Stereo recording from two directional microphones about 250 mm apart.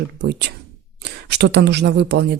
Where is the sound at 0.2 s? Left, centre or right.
Right.